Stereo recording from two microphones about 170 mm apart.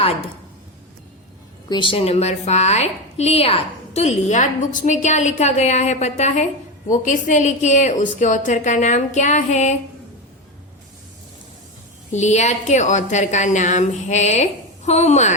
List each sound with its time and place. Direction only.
1.7 s a woman's voice: 30° left (ahead or behind)
12.1 s a woman's voice: 45° left (ahead or behind)